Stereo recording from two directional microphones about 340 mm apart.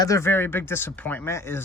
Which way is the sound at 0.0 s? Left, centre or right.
Centre.